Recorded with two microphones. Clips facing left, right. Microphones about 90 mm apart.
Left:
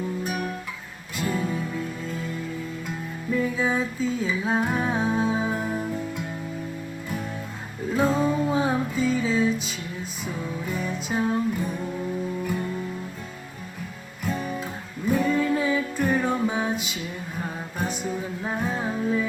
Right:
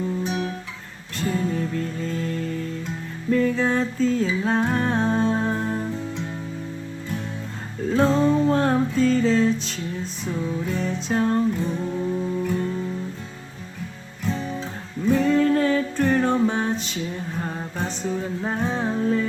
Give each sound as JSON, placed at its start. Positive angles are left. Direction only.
{"t": 1.1, "sound": "music", "side_deg": 5}
{"t": 2.1, "sound": "music", "side_deg": -90}
{"t": 3.5, "sound": "music", "side_deg": 5}
{"t": 7.9, "sound": "music", "side_deg": 10}
{"t": 15.0, "sound": "female singing", "side_deg": 10}
{"t": 15.7, "sound": "music", "side_deg": 10}